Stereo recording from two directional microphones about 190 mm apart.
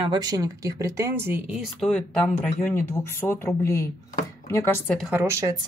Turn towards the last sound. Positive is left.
turn(degrees=-15)  # may be behind; listen again after turning